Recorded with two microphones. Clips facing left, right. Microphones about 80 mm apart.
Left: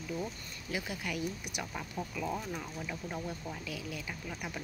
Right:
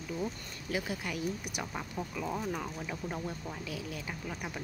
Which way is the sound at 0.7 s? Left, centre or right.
Right.